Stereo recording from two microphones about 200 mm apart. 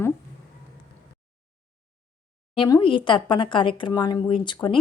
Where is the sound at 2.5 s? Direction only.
25° left (ahead or behind).